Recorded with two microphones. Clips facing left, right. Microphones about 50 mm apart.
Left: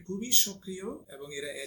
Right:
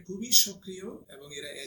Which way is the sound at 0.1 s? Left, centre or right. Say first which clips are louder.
Even; left.